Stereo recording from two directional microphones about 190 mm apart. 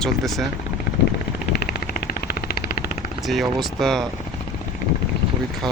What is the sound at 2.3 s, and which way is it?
Vehicle, 50° left (ahead or behind).